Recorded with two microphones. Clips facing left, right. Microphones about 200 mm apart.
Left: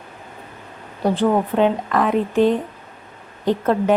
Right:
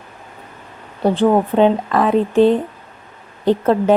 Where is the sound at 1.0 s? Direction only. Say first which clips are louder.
Right 4 dB; 30° right (ahead or behind).